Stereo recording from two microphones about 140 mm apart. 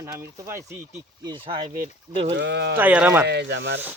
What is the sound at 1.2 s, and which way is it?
Speech, 35° right (ahead or behind).